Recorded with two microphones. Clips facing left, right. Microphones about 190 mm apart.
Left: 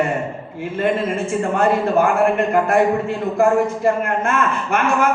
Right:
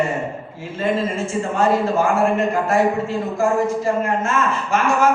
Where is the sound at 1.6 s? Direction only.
60° left (ahead or behind).